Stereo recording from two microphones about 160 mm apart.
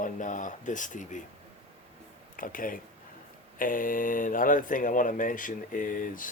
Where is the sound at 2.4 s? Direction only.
60° left (ahead or behind).